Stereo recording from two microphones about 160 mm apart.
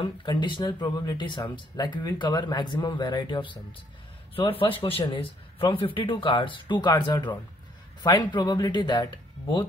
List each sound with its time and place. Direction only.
0.0 s speech: 30° left (ahead or behind)